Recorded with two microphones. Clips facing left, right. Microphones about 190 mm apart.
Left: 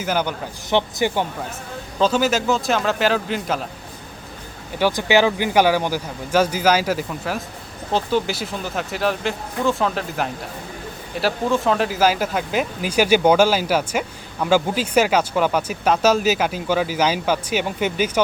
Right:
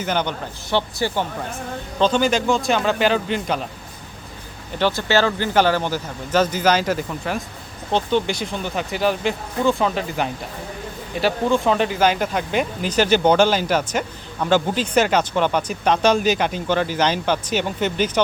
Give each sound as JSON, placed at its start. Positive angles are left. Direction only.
{"t": 0.0, "sound": "speech", "side_deg": 5}
{"t": 0.7, "sound": "speech", "side_deg": 20}
{"t": 2.0, "sound": "speech", "side_deg": 5}
{"t": 4.8, "sound": "speech", "side_deg": 15}